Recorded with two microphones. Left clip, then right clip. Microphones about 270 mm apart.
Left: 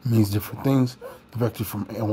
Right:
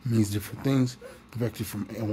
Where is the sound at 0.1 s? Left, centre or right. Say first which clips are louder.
Left 4 dB; centre.